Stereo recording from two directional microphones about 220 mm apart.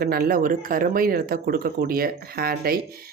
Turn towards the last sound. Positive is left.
turn(degrees=-45)  # may be behind; listen again after turning